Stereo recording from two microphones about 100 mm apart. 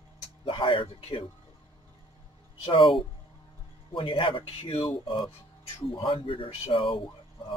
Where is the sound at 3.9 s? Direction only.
55° left (ahead or behind).